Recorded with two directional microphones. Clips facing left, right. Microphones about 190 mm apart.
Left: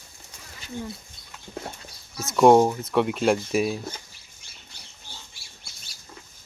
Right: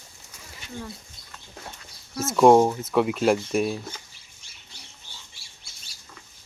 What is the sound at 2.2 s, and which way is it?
Speech, centre (ahead or behind).